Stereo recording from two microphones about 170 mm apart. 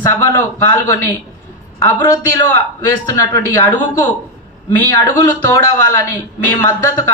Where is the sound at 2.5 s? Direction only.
15° left (ahead or behind).